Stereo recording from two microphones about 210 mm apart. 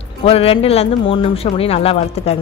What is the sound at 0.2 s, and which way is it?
Speech, 25° left (ahead or behind).